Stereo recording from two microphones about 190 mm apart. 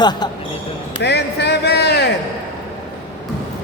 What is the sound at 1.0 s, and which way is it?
Speech, 60° left (ahead or behind).